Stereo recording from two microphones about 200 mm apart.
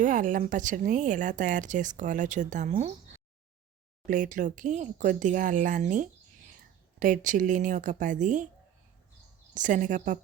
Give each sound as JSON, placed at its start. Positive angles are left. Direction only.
{"t": 0.0, "sound": "speech", "side_deg": -40}
{"t": 4.0, "sound": "speech", "side_deg": -40}
{"t": 9.6, "sound": "speech", "side_deg": -40}